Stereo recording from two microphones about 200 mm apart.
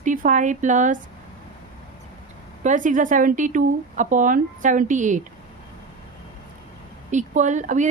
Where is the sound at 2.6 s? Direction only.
40° right (ahead or behind).